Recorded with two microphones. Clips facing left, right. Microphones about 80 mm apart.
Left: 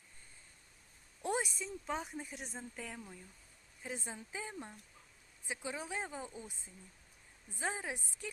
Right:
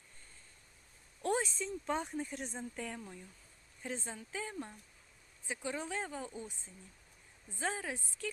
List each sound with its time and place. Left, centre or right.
1.2 s a woman's voice: centre
3.8 s a woman's voice: centre